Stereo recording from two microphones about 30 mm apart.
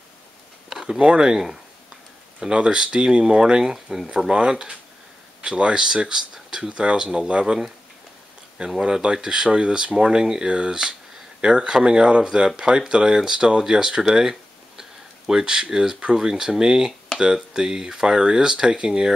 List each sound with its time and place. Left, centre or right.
0.9 s speech: right
1.2 s speech: centre
2.5 s speech: right
3.7 s speech: centre
4.3 s speech: right
6.7 s speech: right
8.5 s speech: right
10.5 s speech: right
14.8 s a sound: centre
16.2 s speech: centre